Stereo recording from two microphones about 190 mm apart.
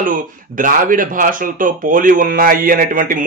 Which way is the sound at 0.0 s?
45° right (ahead or behind).